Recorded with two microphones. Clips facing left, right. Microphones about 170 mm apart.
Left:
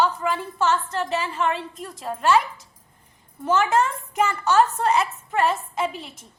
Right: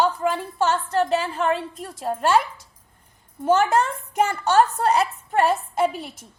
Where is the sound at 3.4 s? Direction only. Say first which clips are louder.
Right 2 dB; 40° right (ahead or behind).